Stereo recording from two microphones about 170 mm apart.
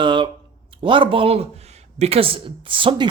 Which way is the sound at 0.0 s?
30° right (ahead or behind).